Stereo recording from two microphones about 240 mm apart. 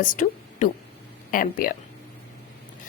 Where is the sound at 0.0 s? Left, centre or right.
Left.